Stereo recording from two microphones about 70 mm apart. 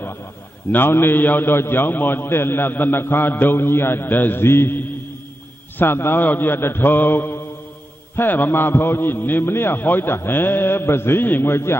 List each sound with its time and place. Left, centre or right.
0.7 s a man's voice: left